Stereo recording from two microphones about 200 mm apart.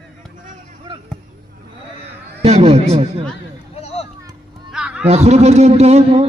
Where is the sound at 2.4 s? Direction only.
30° right (ahead or behind).